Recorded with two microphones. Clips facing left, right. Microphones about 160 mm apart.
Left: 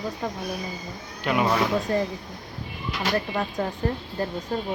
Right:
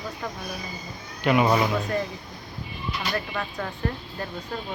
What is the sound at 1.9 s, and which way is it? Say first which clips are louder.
Speech: left 3 dB; 30° left (ahead or behind).